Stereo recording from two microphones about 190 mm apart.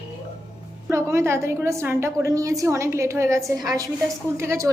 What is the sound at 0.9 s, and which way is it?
A woman's voice, 15° right (ahead or behind).